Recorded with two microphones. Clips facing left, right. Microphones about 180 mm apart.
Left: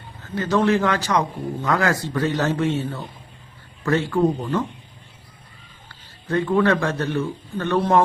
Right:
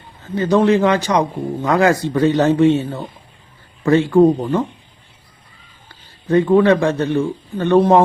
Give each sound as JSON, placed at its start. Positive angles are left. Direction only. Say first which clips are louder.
{"t": 0.3, "sound": "a man's voice", "louder": "right 5 dB", "side_deg": -20}
{"t": 3.8, "sound": "a man's voice", "louder": "right 8 dB", "side_deg": -20}
{"t": 6.2, "sound": "a man's voice", "louder": "right 7 dB", "side_deg": -20}